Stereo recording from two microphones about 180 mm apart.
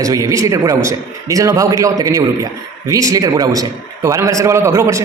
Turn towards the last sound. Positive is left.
turn(degrees=-15)  # may be behind; listen again after turning